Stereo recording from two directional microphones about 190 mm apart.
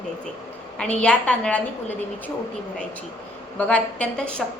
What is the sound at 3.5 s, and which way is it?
Speech, 5° left (ahead or behind).